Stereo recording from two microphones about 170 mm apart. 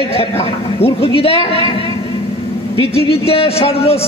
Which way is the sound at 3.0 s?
35° left (ahead or behind).